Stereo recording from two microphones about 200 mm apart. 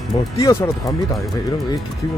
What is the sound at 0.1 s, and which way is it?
Speech, 20° left (ahead or behind).